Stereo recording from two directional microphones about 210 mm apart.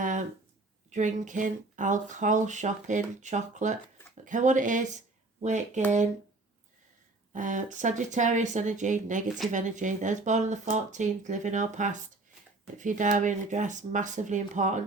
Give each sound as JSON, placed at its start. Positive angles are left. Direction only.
{"t": 0.9, "sound": "speech", "side_deg": -35}
{"t": 7.3, "sound": "speech", "side_deg": -35}